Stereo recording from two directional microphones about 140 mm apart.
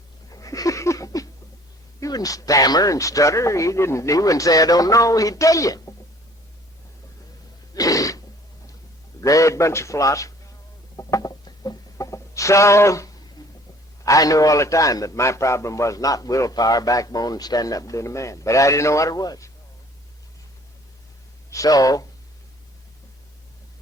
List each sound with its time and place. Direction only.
0.3 s a sound: 25° left (ahead or behind)
2.0 s a man's voice: 25° left (ahead or behind)
7.7 s sneeze: 25° left (ahead or behind)
9.2 s a man's voice: 25° left (ahead or behind)
10.9 s music: 25° left (ahead or behind)
13.4 s a sound: 25° left (ahead or behind)
14.0 s a man's voice: 25° left (ahead or behind)
21.5 s a man's voice: 25° left (ahead or behind)